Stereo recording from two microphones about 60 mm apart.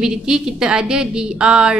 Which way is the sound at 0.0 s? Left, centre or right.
Centre.